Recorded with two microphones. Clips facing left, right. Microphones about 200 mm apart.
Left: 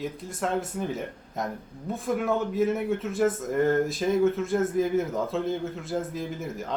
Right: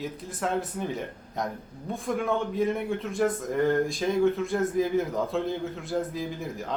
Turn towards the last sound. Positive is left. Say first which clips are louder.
# even
turn(degrees=0)  # may be behind; listen again after turning